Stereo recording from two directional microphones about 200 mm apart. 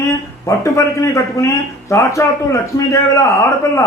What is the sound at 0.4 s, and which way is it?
A man's voice, 15° left (ahead or behind).